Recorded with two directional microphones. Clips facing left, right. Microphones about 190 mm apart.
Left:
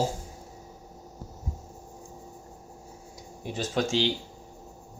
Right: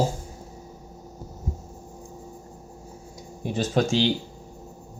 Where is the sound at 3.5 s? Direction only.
45° right (ahead or behind).